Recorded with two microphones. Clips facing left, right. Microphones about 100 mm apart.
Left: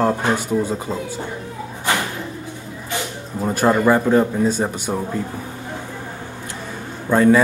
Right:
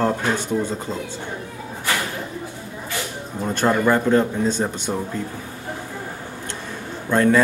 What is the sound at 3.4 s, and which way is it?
Speech, 10° left (ahead or behind).